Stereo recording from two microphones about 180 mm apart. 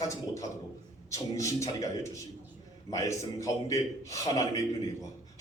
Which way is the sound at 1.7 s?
15° left (ahead or behind).